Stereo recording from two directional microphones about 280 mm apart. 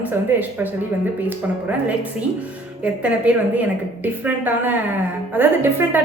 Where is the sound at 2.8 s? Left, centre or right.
Centre.